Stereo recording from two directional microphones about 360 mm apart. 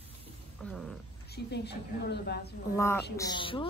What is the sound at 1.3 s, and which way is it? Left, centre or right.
A woman's voice, left.